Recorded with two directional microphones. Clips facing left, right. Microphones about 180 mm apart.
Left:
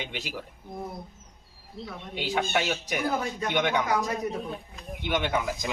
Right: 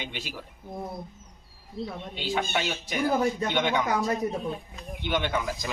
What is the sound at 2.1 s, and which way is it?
Speech, 10° left (ahead or behind).